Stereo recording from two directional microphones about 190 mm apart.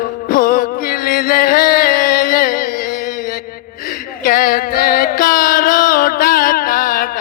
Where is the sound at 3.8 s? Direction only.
50° left (ahead or behind).